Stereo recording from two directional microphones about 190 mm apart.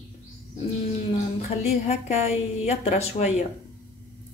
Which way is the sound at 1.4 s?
35° left (ahead or behind).